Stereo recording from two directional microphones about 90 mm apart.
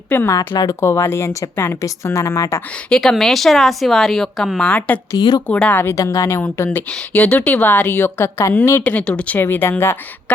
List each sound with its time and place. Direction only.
0.1 s a woman's voice: 20° left (ahead or behind)
2.9 s speech: 5° left (ahead or behind)
5.1 s speech: 50° left (ahead or behind)
5.5 s speech: 15° left (ahead or behind)
5.9 s a woman's voice: 35° left (ahead or behind)
8.8 s speech: 15° left (ahead or behind)